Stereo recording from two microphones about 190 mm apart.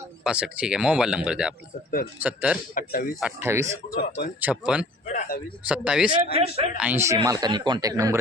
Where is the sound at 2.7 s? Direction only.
45° left (ahead or behind).